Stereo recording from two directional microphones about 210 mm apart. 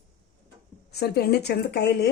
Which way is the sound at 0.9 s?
50° left (ahead or behind).